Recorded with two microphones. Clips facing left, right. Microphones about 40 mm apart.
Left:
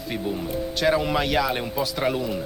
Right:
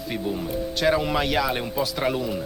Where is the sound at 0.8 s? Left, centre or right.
Centre.